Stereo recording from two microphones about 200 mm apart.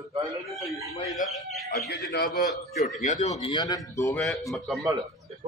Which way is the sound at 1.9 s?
50° left (ahead or behind).